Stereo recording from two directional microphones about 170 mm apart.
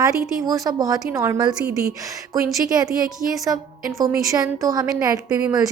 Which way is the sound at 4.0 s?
20° right (ahead or behind).